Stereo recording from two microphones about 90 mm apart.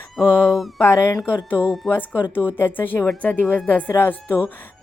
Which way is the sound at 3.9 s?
25° left (ahead or behind).